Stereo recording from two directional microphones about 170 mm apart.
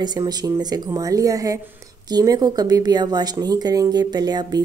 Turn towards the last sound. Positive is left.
turn(degrees=-25)  # may be behind; listen again after turning